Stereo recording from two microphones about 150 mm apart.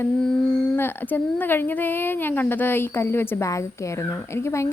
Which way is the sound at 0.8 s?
15° left (ahead or behind).